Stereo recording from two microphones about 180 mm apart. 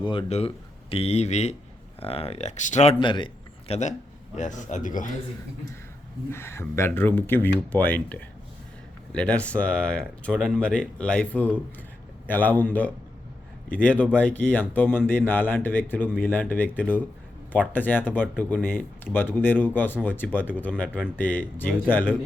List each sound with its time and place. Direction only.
0.0 s speech: 30° left (ahead or behind)
3.0 s speech: 25° left (ahead or behind)
3.7 s speech: 40° left (ahead or behind)
6.3 s speech: 15° left (ahead or behind)